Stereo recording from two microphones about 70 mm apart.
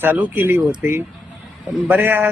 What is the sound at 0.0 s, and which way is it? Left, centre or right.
Speech, right.